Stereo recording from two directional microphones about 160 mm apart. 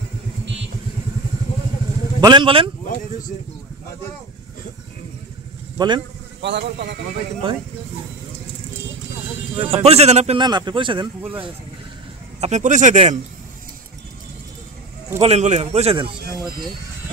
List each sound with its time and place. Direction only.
2.1 s a man's voice: 30° right (ahead or behind)
5.8 s speech: 30° right (ahead or behind)
6.4 s speech: 90° right
7.4 s a man's voice: 35° right (ahead or behind)
9.7 s a man's voice: 40° right (ahead or behind)
10.4 s a man's voice: 25° right (ahead or behind)
12.4 s speech: 45° right (ahead or behind)
15.1 s a man's voice: 40° right (ahead or behind)